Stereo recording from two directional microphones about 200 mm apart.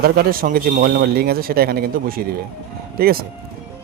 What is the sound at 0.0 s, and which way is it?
A man's voice, 45° right (ahead or behind).